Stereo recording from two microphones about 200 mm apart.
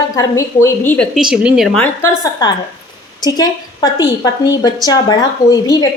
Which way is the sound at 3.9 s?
20° left (ahead or behind).